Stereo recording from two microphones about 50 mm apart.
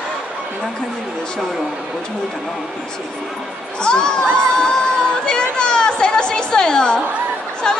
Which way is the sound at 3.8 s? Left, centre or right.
Centre.